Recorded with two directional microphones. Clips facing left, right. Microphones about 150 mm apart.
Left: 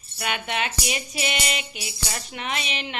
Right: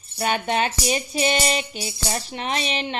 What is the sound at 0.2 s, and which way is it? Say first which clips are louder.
Speech: right 6 dB; 35° right (ahead or behind).